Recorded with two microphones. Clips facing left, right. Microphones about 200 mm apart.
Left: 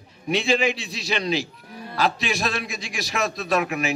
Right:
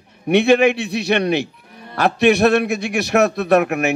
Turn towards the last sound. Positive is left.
turn(degrees=-60)  # may be behind; listen again after turning